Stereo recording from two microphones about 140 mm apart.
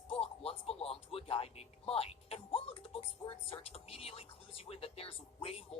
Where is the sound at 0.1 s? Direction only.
45° left (ahead or behind).